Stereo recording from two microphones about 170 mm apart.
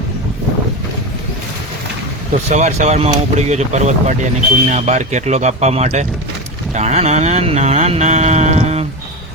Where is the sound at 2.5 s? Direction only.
40° right (ahead or behind).